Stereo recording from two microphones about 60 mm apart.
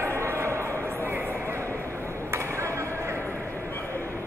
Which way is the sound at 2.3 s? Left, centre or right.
Right.